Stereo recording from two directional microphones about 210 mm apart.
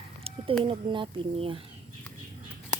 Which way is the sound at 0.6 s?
25° right (ahead or behind).